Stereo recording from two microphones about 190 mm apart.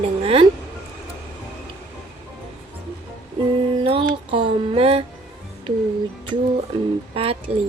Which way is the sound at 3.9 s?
30° right (ahead or behind).